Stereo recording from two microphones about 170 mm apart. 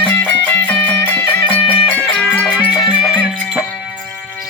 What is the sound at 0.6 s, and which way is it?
Music, 10° left (ahead or behind).